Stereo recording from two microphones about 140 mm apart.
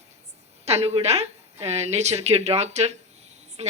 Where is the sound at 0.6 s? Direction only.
50° right (ahead or behind).